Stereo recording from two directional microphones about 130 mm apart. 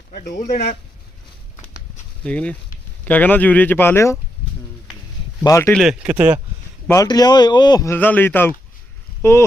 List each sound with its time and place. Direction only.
0.1 s speech: 80° left
2.2 s speech: 10° left (ahead or behind)
5.4 s speech: 20° left (ahead or behind)
5.7 s speech: 5° right (ahead or behind)
6.8 s speech: 25° left (ahead or behind)
7.9 s speech: 15° left (ahead or behind)